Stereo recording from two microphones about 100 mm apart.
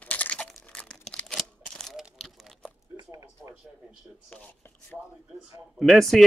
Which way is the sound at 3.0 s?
35° right (ahead or behind).